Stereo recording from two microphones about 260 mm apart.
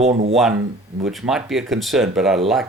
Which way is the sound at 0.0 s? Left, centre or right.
Right.